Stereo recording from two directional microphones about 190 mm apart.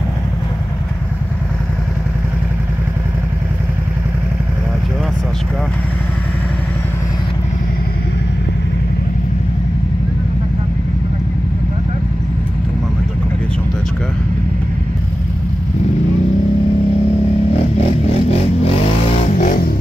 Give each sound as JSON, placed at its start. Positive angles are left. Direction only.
{"t": 19.3, "sound": "music", "side_deg": 45}